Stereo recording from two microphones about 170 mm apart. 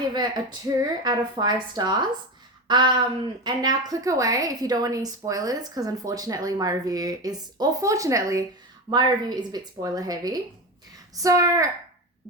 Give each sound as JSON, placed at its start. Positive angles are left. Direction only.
{"t": 0.1, "sound": "a woman's voice", "side_deg": -25}